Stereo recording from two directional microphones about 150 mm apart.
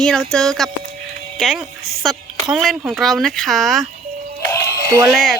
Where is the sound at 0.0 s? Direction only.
5° left (ahead or behind).